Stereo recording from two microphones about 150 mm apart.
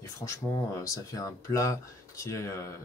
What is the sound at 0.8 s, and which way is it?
Speech, 20° left (ahead or behind).